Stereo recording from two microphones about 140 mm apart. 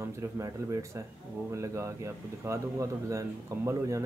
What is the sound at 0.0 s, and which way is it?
Speech, 25° right (ahead or behind).